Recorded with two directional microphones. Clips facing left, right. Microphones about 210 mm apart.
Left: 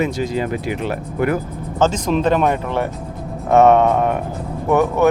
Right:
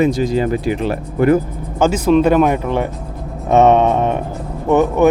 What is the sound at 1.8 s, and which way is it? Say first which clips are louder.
Speech: right 5 dB; 10° right (ahead or behind).